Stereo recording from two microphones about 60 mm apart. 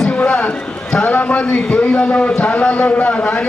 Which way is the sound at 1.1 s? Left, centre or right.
Left.